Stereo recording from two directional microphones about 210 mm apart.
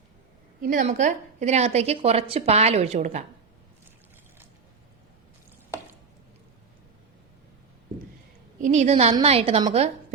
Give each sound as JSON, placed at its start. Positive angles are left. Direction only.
{"t": 0.6, "sound": "a woman's voice", "side_deg": -40}
{"t": 8.6, "sound": "a woman's voice", "side_deg": -35}